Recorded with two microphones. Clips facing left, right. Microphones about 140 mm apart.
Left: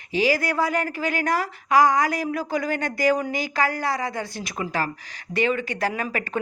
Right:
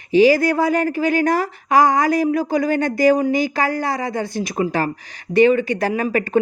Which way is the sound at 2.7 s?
20° right (ahead or behind).